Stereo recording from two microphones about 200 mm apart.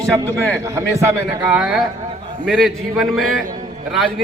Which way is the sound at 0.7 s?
15° right (ahead or behind).